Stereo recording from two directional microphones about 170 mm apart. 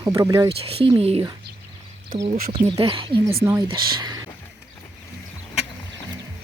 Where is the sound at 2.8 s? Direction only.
30° right (ahead or behind).